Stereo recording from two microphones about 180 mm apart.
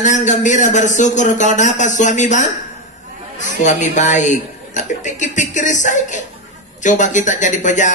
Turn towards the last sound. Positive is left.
turn(degrees=45)  # may be behind; listen again after turning